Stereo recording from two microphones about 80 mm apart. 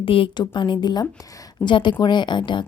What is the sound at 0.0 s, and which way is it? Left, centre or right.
A woman's voice, left.